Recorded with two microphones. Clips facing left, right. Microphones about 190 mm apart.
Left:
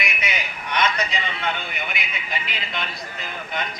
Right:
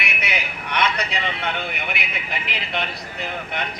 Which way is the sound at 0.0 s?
65° right (ahead or behind).